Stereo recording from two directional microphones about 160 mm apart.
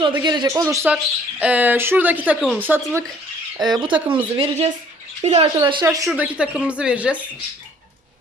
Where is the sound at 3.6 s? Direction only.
30° right (ahead or behind).